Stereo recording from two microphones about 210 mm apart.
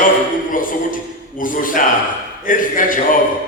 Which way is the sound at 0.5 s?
40° left (ahead or behind).